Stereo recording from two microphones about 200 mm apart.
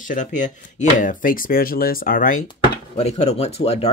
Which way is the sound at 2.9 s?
30° left (ahead or behind).